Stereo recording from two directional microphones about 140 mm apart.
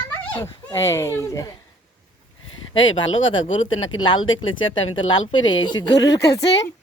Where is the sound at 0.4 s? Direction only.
20° left (ahead or behind).